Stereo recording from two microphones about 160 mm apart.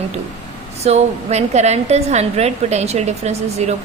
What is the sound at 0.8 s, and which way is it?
A woman's voice, 45° right (ahead or behind).